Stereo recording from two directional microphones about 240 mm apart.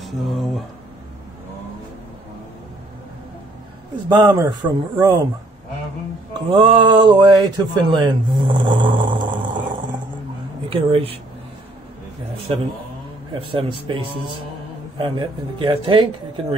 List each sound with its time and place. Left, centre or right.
0.0 s speech: centre
4.1 s speech: centre
6.3 s speech: centre
13.3 s speech: right